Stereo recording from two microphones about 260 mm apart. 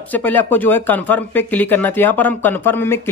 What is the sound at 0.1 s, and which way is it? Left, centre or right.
Speech, centre.